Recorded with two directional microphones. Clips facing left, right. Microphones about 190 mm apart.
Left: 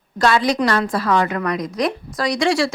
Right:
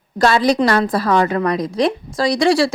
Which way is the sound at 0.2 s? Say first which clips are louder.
Right 3 dB; 35° right (ahead or behind).